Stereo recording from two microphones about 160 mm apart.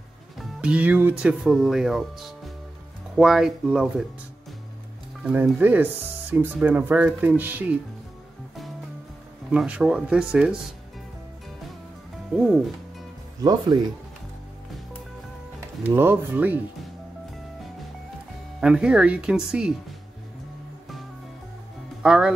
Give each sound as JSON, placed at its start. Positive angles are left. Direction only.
{"t": 0.4, "sound": "speech", "side_deg": -5}
{"t": 5.2, "sound": "speech", "side_deg": -10}
{"t": 9.5, "sound": "speech", "side_deg": -5}
{"t": 13.4, "sound": "speech", "side_deg": -25}
{"t": 15.8, "sound": "speech", "side_deg": -15}
{"t": 18.6, "sound": "speech", "side_deg": -5}
{"t": 22.0, "sound": "speech", "side_deg": -5}